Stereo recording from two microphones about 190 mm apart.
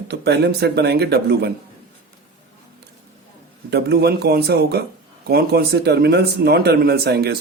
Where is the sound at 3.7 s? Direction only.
60° right (ahead or behind).